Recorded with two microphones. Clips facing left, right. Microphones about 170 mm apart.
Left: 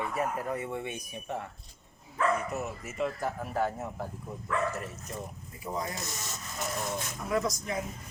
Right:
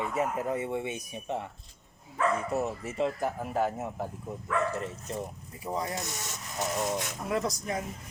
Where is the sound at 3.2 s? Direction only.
15° right (ahead or behind).